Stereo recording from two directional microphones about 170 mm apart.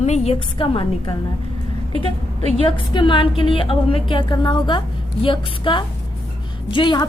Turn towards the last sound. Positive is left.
turn(degrees=25)  # may be behind; listen again after turning